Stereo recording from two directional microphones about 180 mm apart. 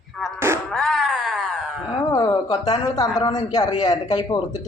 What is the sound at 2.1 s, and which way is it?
A woman's voice, 20° left (ahead or behind).